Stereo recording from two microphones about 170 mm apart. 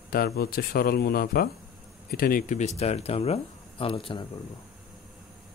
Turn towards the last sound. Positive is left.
turn(degrees=30)  # may be behind; listen again after turning